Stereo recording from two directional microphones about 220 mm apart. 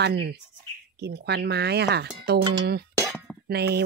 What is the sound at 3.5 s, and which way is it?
Speech, 45° right (ahead or behind).